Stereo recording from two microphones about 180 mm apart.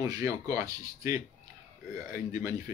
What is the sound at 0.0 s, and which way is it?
Speech, 20° right (ahead or behind).